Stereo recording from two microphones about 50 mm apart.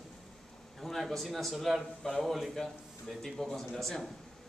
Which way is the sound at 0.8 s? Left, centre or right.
Centre.